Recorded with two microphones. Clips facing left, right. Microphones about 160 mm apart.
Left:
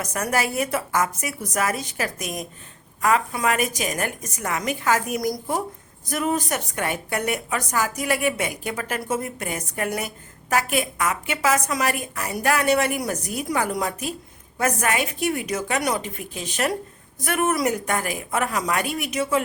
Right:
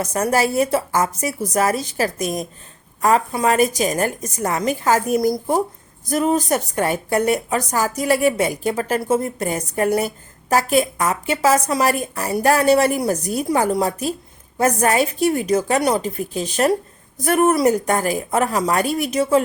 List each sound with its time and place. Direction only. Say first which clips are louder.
0.0 s a woman's voice: right 6 dB; 30° right (ahead or behind)